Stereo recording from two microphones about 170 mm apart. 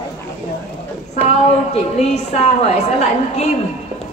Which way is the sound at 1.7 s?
40° left (ahead or behind).